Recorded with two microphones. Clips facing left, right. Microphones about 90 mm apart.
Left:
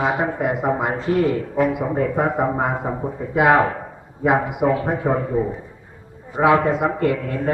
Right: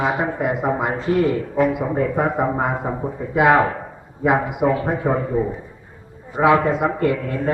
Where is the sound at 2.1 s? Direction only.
10° left (ahead or behind).